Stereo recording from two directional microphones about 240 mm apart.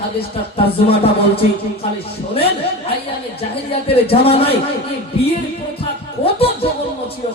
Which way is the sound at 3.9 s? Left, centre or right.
Left.